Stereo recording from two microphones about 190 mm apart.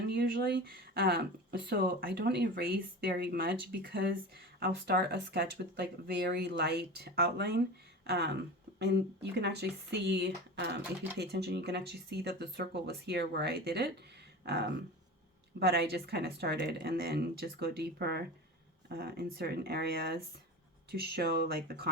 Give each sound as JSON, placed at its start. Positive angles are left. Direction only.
{"t": 0.1, "sound": "speech", "side_deg": -55}